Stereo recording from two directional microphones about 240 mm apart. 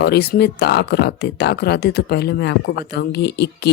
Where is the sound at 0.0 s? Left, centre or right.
Left.